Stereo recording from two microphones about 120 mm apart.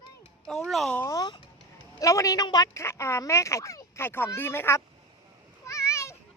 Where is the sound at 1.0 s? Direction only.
35° left (ahead or behind).